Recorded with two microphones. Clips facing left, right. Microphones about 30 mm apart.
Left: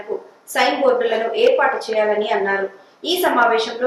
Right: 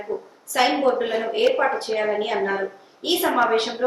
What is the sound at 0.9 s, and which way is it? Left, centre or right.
Speech, left.